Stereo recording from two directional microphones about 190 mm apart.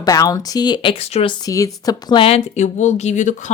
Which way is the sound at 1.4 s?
20° left (ahead or behind).